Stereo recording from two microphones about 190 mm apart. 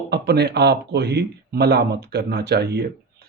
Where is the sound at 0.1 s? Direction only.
60° right (ahead or behind).